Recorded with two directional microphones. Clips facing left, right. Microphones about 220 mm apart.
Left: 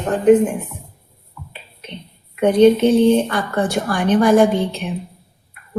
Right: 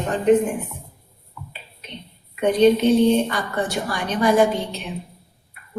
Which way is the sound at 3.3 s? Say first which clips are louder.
Left 5 dB; 50° left (ahead or behind).